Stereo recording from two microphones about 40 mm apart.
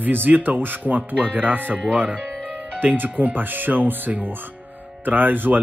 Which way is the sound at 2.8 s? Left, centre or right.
Right.